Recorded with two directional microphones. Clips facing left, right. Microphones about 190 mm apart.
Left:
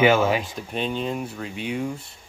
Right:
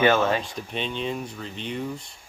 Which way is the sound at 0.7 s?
45° left (ahead or behind).